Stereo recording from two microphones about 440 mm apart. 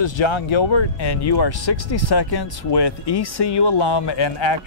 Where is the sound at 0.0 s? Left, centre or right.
Left.